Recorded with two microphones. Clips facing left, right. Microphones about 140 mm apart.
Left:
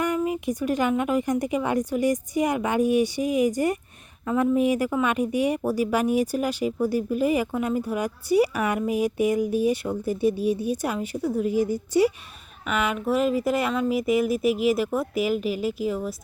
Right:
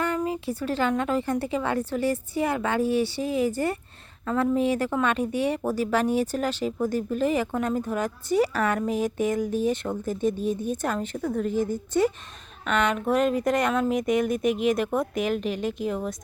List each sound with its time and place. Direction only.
0.0 s speech: 15° left (ahead or behind)